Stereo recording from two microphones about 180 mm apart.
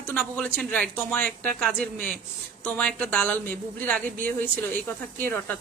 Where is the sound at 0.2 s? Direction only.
5° left (ahead or behind).